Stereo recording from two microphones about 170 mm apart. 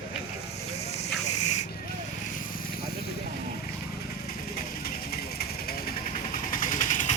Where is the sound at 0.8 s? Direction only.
40° left (ahead or behind).